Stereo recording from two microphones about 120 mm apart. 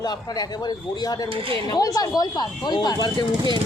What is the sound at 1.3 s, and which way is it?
Speech, 45° right (ahead or behind).